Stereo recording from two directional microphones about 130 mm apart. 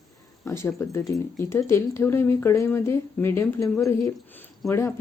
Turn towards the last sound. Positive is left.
turn(degrees=20)  # may be behind; listen again after turning